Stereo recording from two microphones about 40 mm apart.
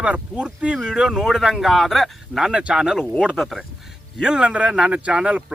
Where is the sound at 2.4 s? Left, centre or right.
Centre.